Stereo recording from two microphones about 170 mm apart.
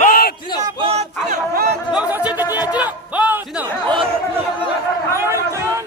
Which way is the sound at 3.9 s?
30° right (ahead or behind).